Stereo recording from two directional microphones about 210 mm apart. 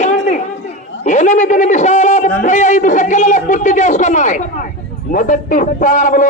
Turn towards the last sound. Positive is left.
turn(degrees=40)  # may be behind; listen again after turning